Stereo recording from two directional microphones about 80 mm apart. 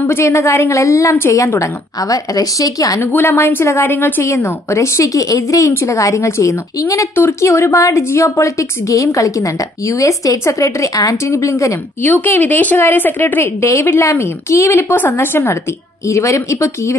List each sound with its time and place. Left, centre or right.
0.0 s a woman's voice: left
2.0 s a woman's voice: left
3.0 s a woman's voice: left
12.0 s speech: left
13.6 s a woman's voice: left
16.1 s a woman's voice: left